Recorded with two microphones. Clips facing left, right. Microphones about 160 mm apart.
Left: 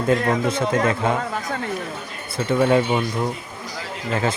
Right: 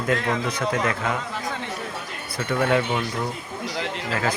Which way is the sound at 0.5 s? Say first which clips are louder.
Left 4 dB; 25° left (ahead or behind).